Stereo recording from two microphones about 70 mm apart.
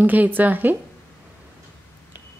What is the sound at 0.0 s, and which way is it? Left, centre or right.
Speech, right.